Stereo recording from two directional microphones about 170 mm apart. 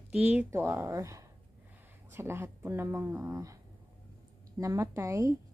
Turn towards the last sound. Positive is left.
turn(degrees=-20)  # may be behind; listen again after turning